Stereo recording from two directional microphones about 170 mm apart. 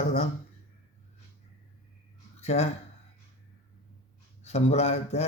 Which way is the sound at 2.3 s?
40° left (ahead or behind).